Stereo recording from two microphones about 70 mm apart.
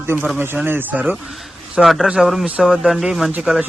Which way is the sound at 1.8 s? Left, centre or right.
Centre.